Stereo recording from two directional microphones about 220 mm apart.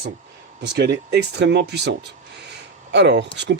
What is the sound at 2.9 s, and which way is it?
Speech, 50° right (ahead or behind).